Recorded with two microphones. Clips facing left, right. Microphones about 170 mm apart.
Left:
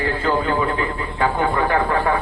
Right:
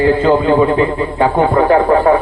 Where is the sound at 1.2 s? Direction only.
40° right (ahead or behind).